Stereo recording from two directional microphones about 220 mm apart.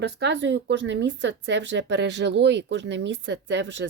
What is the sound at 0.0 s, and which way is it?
Speech, 50° right (ahead or behind).